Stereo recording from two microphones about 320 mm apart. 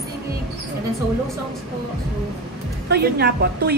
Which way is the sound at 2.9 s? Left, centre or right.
Right.